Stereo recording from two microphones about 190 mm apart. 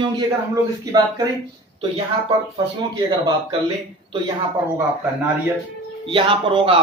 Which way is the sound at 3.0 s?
20° right (ahead or behind).